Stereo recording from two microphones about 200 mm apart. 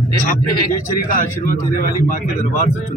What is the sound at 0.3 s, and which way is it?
Speech, 45° left (ahead or behind).